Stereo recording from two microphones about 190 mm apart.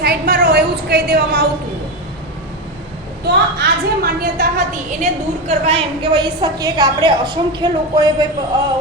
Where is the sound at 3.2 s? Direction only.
55° right (ahead or behind).